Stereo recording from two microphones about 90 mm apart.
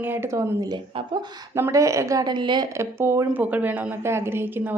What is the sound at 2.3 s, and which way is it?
Speech, 60° right (ahead or behind).